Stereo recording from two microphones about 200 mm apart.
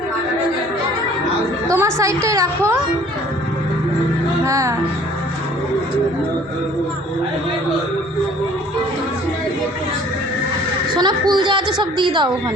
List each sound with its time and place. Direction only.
1.7 s a woman's voice: 15° right (ahead or behind)
4.4 s a woman's voice: 15° right (ahead or behind)
10.9 s a woman's voice: 20° right (ahead or behind)